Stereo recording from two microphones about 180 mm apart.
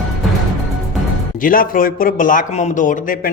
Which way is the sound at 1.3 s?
50° left (ahead or behind).